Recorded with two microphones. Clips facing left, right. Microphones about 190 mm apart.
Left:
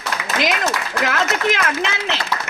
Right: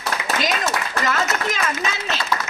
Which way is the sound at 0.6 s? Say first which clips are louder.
Left 2 dB; 70° left (ahead or behind).